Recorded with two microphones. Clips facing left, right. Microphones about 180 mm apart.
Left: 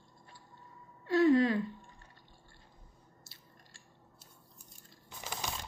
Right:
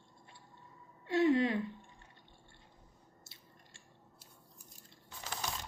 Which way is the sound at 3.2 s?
20° right (ahead or behind).